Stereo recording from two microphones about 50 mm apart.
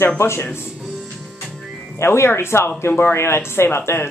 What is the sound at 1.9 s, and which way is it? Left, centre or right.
Speech, left.